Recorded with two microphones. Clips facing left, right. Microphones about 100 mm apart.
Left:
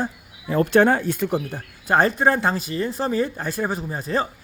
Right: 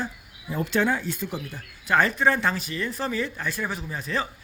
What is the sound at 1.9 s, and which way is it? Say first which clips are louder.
Speech: left 3 dB; 40° left (ahead or behind).